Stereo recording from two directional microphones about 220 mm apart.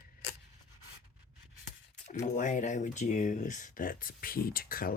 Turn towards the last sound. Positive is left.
turn(degrees=40)  # may be behind; listen again after turning